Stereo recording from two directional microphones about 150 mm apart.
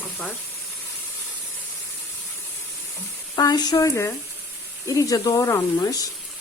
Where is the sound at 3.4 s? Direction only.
25° left (ahead or behind).